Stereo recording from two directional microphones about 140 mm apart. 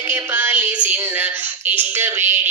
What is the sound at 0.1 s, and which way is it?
Music, 15° right (ahead or behind).